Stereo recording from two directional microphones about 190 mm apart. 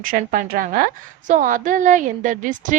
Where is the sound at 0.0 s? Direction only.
45° right (ahead or behind).